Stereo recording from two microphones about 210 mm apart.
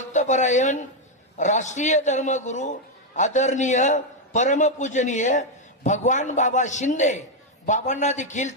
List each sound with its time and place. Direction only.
0.1 s a man's voice: 35° left (ahead or behind)